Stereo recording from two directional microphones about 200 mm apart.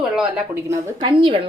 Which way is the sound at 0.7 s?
20° right (ahead or behind).